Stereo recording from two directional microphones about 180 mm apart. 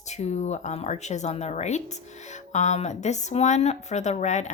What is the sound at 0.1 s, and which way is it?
Speech, 40° left (ahead or behind).